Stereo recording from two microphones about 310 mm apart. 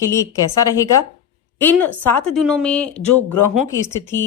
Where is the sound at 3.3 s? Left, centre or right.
Left.